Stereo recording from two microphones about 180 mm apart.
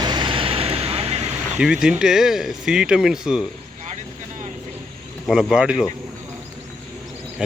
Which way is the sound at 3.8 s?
40° right (ahead or behind).